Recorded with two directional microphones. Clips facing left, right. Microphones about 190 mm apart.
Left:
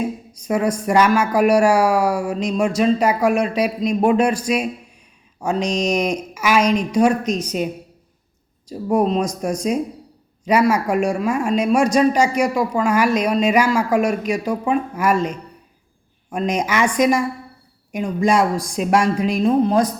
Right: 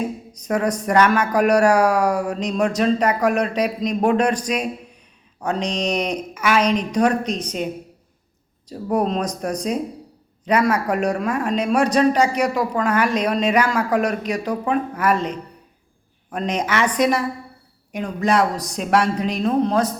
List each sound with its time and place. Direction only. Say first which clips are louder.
0.4 s a man's voice: left 2 dB; 10° left (ahead or behind)
5.5 s speech: left 4 dB; 35° right (ahead or behind)
5.9 s a man's voice: left 3 dB; 10° left (ahead or behind)
7.3 s speech: left 3 dB; 30° right (ahead or behind)
8.7 s a man's voice: left 3 dB; 10° left (ahead or behind)